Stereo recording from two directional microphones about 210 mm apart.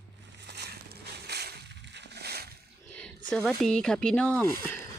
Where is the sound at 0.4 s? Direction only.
50° right (ahead or behind).